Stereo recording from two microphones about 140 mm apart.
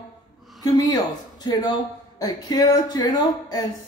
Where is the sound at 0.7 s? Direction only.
30° left (ahead or behind).